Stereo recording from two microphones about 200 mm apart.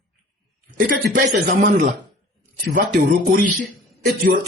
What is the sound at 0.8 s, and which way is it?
Speech, 40° right (ahead or behind).